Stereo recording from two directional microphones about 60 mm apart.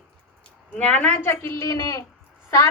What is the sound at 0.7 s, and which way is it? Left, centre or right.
Speech, centre.